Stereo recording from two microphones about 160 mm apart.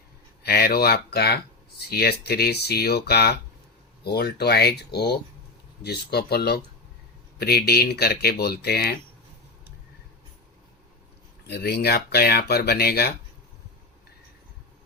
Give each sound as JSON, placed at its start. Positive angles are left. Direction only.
{"t": 0.4, "sound": "speech", "side_deg": 75}
{"t": 11.4, "sound": "speech", "side_deg": 90}